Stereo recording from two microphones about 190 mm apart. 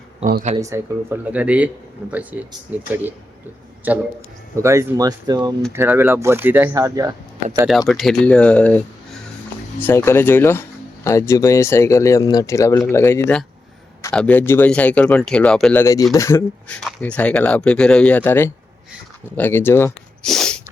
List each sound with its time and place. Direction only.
0.5 s speech: 15° right (ahead or behind)
3.8 s speech: 10° right (ahead or behind)
7.9 s speech: centre (ahead or behind)
15.8 s speech: 15° left (ahead or behind)
20.3 s a sound: 5° left (ahead or behind)